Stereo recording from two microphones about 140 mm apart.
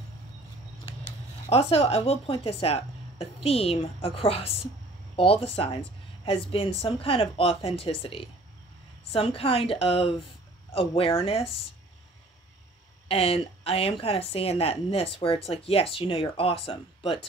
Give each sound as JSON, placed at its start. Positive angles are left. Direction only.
{"t": 1.5, "sound": "a woman's voice", "side_deg": 45}
{"t": 13.1, "sound": "a woman's voice", "side_deg": 45}